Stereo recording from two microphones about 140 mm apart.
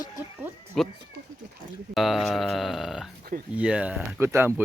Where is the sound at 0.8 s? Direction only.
Centre (ahead or behind).